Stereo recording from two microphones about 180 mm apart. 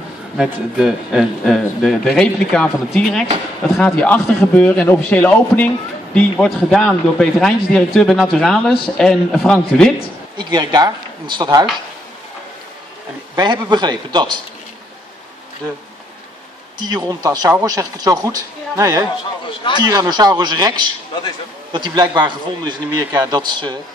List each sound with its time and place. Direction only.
0.4 s a man's voice: 5° right (ahead or behind)
10.3 s a man's voice: 25° right (ahead or behind)
13.4 s a man's voice: 25° right (ahead or behind)
16.8 s a man's voice: 20° right (ahead or behind)